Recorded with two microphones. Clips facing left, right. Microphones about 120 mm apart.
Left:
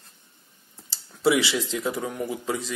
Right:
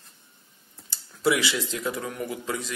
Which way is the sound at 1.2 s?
25° left (ahead or behind).